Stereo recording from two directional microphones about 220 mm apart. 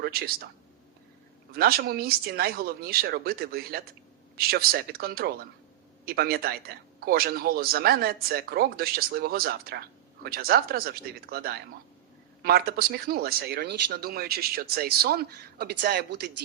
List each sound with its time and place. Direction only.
0.0 s speech: 45° right (ahead or behind)
1.5 s a man's voice: 45° right (ahead or behind)